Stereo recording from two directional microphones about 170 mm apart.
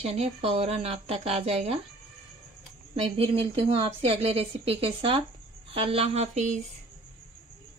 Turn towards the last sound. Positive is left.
turn(degrees=-40)  # may be behind; listen again after turning